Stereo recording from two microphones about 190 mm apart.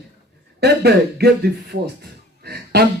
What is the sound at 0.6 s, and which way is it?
Speech, 60° right (ahead or behind).